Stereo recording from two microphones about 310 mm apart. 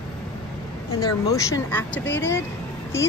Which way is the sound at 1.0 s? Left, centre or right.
Centre.